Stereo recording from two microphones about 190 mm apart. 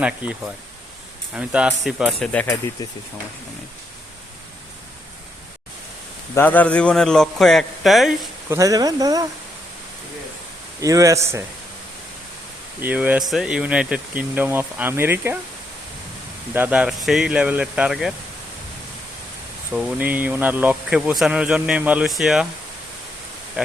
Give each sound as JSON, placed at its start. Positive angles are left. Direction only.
{"t": 0.0, "sound": "speech", "side_deg": -5}
{"t": 6.3, "sound": "speech", "side_deg": 10}
{"t": 8.4, "sound": "speech", "side_deg": -15}
{"t": 10.8, "sound": "speech", "side_deg": -15}
{"t": 12.8, "sound": "speech", "side_deg": -10}
{"t": 16.6, "sound": "speech", "side_deg": -5}
{"t": 19.7, "sound": "speech", "side_deg": -10}